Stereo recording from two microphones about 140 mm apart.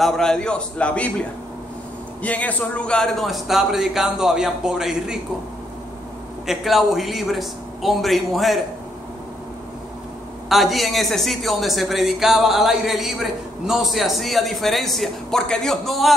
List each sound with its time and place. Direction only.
0.0 s a man's voice: 5° left (ahead or behind)
2.2 s a woman's voice: 10° left (ahead or behind)
6.4 s a woman's voice: centre (ahead or behind)
10.5 s a woman's voice: centre (ahead or behind)